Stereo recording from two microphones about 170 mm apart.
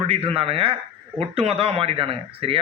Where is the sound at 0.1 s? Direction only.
35° right (ahead or behind).